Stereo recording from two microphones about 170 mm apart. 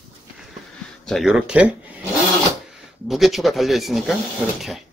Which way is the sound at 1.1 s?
Centre (ahead or behind).